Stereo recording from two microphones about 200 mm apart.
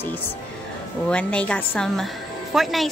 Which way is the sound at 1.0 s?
5° left (ahead or behind).